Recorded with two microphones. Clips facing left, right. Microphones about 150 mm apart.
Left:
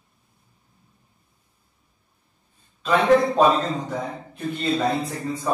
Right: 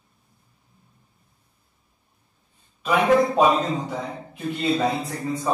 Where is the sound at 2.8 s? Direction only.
10° right (ahead or behind).